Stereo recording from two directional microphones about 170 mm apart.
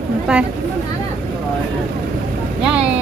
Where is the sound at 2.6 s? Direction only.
5° right (ahead or behind).